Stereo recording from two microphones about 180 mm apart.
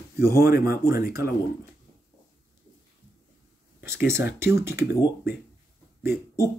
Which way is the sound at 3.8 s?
15° right (ahead or behind).